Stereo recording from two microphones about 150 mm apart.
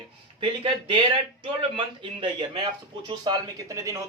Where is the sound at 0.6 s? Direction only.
35° right (ahead or behind).